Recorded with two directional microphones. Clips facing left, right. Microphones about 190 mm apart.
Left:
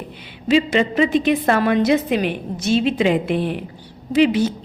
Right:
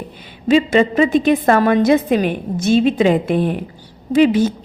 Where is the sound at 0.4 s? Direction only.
50° right (ahead or behind).